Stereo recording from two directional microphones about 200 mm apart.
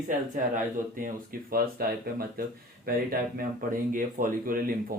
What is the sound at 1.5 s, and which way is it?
Speech, 50° right (ahead or behind).